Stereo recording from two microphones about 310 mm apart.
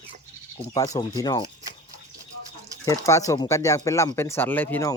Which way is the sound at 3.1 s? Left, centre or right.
Centre.